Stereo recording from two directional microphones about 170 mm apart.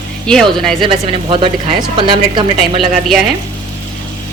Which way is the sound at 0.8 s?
30° right (ahead or behind).